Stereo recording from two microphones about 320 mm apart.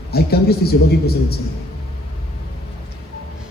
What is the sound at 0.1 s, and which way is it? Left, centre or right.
Speech, left.